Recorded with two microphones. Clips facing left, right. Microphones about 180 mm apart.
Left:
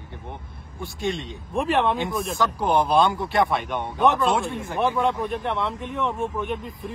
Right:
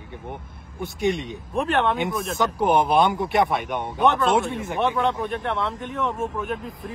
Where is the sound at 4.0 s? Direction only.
Centre (ahead or behind).